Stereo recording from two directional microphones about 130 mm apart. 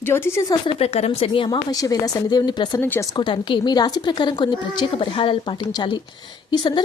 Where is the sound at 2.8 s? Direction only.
15° left (ahead or behind).